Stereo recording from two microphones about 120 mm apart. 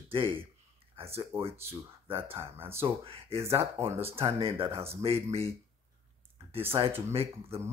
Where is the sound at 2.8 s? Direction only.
55° right (ahead or behind).